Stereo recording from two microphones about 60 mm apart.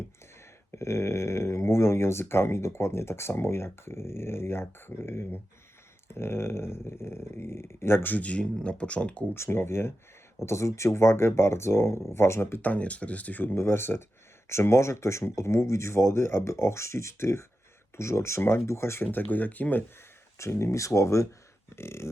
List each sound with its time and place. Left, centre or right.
0.8 s speech: left
8.1 s speech: left
9.3 s speech: left
12.6 s speech: left
13.6 s speech: left
19.0 s speech: left
20.4 s speech: left